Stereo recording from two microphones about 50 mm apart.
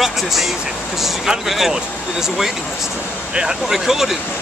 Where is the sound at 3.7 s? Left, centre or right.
Centre.